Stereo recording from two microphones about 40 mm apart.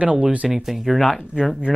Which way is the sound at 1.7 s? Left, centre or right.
Centre.